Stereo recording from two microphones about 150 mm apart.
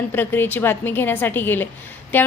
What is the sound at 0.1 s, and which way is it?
A woman's voice, 15° left (ahead or behind).